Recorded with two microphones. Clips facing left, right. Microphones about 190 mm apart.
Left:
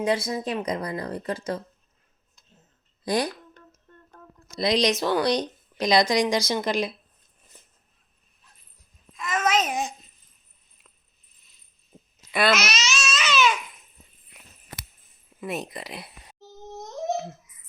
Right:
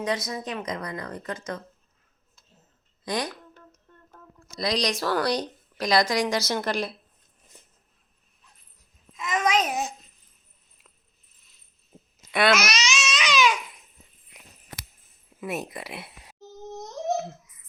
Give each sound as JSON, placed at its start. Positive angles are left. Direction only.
{"t": 0.0, "sound": "speech", "side_deg": 30}
{"t": 3.0, "sound": "speech", "side_deg": 30}
{"t": 4.5, "sound": "a woman's voice", "side_deg": 25}
{"t": 9.1, "sound": "babbling", "side_deg": -20}
{"t": 11.9, "sound": "a sound", "side_deg": -5}
{"t": 12.3, "sound": "speech", "side_deg": 0}
{"t": 12.5, "sound": "babbling", "side_deg": -10}
{"t": 13.2, "sound": "baby cry", "side_deg": -10}
{"t": 15.4, "sound": "speech", "side_deg": -5}